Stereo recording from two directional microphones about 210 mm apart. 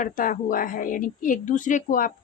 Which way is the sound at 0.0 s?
40° left (ahead or behind).